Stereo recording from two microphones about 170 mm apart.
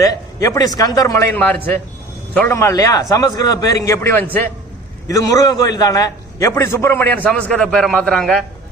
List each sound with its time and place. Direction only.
0.0 s a man's voice: 20° left (ahead or behind); by 8.4 s centre (ahead or behind)